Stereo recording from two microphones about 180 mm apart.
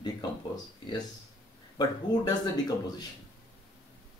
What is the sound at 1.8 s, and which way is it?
Speech, 20° left (ahead or behind).